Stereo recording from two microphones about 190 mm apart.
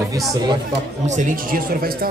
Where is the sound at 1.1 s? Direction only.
40° right (ahead or behind).